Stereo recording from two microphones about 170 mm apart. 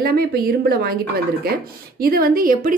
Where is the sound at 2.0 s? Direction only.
60° right (ahead or behind).